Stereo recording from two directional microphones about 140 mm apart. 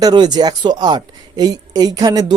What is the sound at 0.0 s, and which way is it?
Speech, 30° right (ahead or behind).